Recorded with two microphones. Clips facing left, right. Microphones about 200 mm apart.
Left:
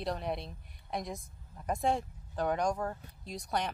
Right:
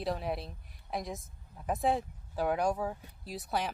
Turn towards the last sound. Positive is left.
turn(degrees=-5)  # may be behind; listen again after turning